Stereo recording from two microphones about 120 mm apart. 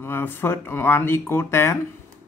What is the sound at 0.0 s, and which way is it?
Speech, 20° left (ahead or behind).